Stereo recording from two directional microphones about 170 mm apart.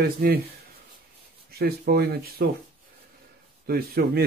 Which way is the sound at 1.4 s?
65° right (ahead or behind).